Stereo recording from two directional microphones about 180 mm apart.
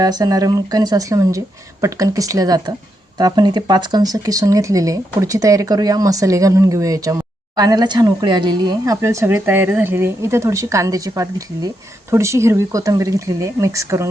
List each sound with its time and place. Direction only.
0.0 s speech: 20° right (ahead or behind)